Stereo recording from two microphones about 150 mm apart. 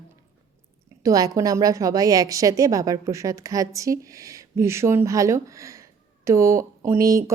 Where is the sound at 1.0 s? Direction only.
25° right (ahead or behind).